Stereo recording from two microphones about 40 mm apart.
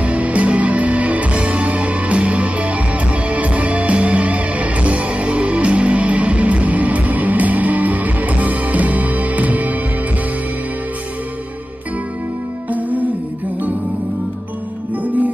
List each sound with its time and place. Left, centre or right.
0.0 s music: right
12.6 s music: right